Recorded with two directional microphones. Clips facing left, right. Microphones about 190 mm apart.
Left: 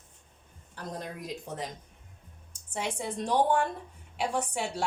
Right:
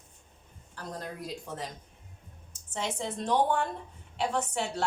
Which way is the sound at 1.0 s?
15° left (ahead or behind).